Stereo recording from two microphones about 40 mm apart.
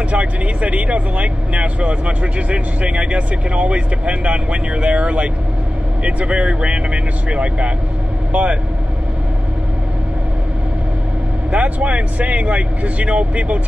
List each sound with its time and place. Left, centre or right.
0.1 s speech: right
11.5 s speech: right